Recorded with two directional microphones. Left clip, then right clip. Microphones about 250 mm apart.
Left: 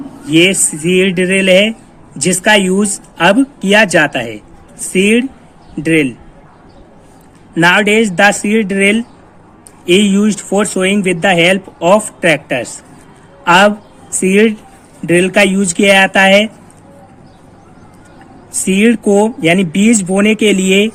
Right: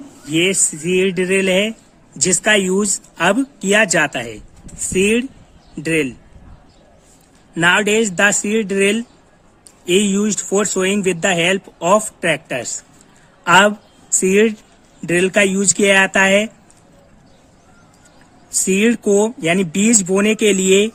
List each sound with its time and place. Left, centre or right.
0.3 s speech: centre
7.5 s speech: right
18.6 s speech: right